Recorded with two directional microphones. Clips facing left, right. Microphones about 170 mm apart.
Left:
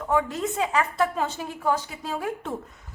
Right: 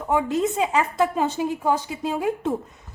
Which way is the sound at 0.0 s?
20° right (ahead or behind).